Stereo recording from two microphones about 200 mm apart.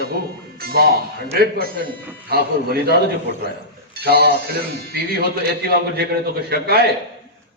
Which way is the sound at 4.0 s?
50° right (ahead or behind).